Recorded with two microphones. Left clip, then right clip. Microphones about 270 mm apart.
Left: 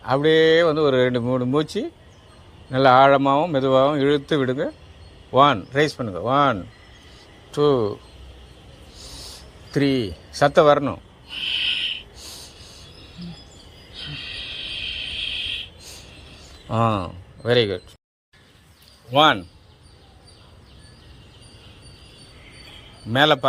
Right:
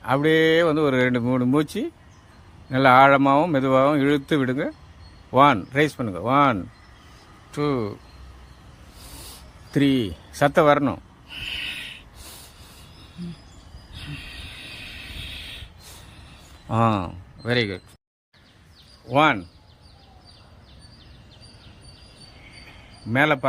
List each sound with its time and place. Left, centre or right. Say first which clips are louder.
0.0 s speech: left 2 dB; centre
9.7 s a sound: even; centre
19.1 s speech: left 3 dB; centre
23.1 s speech: left 3 dB; centre